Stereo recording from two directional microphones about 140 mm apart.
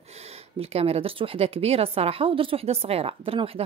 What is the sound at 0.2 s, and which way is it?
A woman's voice, 45° right (ahead or behind).